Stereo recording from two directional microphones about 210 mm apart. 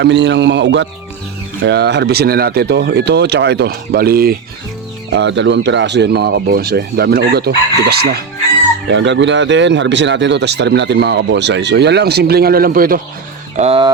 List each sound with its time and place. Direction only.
0.0 s speech: 60° right (ahead or behind)
5.1 s speech: 60° right (ahead or behind)
8.9 s speech: 60° right (ahead or behind); by 13.0 s 45° right (ahead or behind)
13.6 s speech: 25° right (ahead or behind)